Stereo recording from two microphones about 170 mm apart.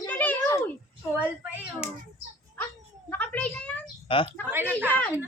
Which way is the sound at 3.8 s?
30° left (ahead or behind).